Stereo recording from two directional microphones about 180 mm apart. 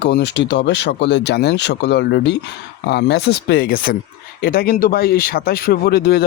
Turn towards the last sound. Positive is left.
turn(degrees=60)  # may be behind; listen again after turning